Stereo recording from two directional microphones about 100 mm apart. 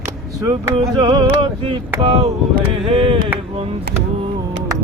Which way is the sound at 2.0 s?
80° right.